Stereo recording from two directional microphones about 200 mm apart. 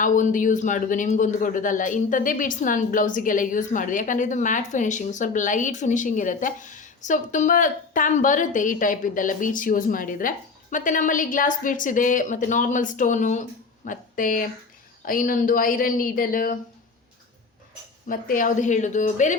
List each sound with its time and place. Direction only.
0.0 s a man's voice: 40° left (ahead or behind)
18.1 s a man's voice: 45° left (ahead or behind)